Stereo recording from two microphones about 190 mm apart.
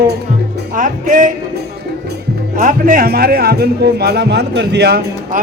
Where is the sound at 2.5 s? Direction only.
45° right (ahead or behind).